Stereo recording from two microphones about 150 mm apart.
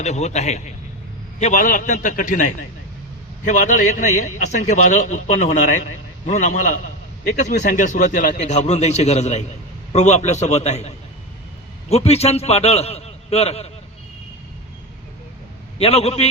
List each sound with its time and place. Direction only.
0.0 s a man's voice: 50° left (ahead or behind)
1.4 s a man's voice: 60° left (ahead or behind); by 13.7 s 40° left (ahead or behind)
15.8 s a man's voice: 40° left (ahead or behind)